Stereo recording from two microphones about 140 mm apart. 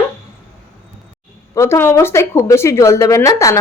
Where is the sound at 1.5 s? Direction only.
20° left (ahead or behind).